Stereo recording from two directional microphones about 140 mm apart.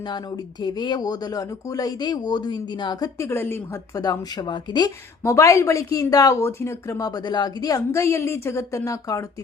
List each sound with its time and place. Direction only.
0.0 s speech: 30° left (ahead or behind)